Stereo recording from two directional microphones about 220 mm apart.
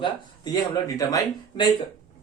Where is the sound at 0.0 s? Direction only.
20° left (ahead or behind).